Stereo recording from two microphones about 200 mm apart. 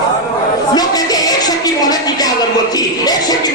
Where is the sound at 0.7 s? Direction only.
20° left (ahead or behind).